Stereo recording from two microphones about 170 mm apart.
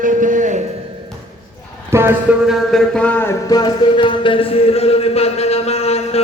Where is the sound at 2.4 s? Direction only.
Centre (ahead or behind).